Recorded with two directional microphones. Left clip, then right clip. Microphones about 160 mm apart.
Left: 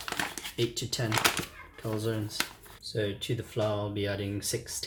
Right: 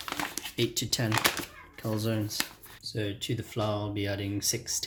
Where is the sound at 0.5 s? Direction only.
55° right (ahead or behind).